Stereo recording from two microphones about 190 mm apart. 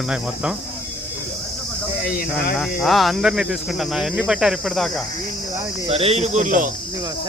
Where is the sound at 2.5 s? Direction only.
Centre (ahead or behind).